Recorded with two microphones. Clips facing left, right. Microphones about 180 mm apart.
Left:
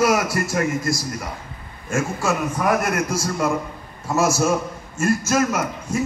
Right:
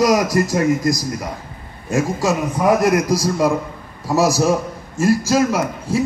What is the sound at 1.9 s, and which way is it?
A man's voice, 35° right (ahead or behind).